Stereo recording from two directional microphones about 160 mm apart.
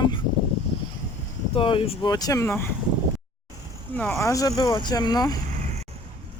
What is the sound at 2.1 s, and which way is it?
Speech, 20° left (ahead or behind).